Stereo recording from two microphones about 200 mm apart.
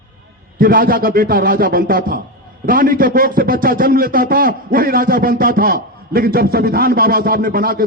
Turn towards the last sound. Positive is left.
turn(degrees=-45)  # may be behind; listen again after turning